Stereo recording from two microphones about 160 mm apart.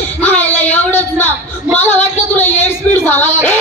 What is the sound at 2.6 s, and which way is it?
Speech, 15° left (ahead or behind).